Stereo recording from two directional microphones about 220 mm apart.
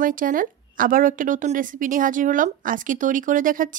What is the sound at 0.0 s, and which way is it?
A woman's voice, 40° right (ahead or behind).